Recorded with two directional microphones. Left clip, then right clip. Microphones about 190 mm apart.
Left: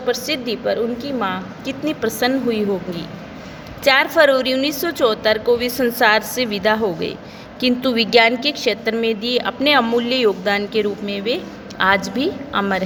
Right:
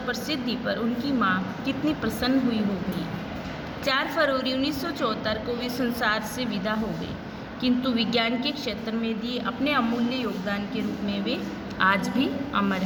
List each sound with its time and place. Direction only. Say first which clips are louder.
0.1 s a woman's voice: left 9 dB; 40° left (ahead or behind)
3.8 s a woman's voice: left 11 dB; 45° left (ahead or behind)
11.8 s a woman's voice: left 6 dB; 30° left (ahead or behind)